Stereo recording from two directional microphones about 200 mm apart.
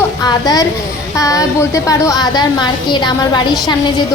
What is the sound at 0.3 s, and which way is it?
A woman's voice, 20° left (ahead or behind).